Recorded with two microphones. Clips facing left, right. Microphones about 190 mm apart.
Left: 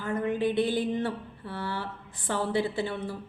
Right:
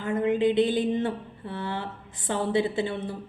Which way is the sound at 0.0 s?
20° right (ahead or behind).